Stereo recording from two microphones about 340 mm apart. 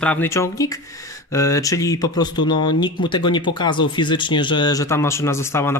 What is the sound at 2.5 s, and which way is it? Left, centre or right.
Speech, left.